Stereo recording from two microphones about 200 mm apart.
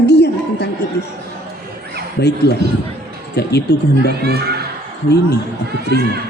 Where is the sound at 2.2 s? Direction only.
55° left (ahead or behind).